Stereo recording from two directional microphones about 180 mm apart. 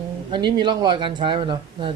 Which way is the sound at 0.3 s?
25° right (ahead or behind).